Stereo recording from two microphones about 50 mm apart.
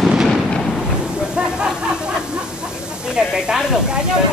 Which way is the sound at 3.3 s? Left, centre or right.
Centre.